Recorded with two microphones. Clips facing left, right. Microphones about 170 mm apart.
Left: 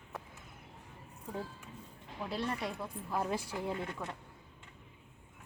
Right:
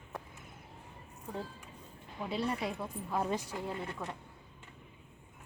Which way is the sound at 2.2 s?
5° right (ahead or behind).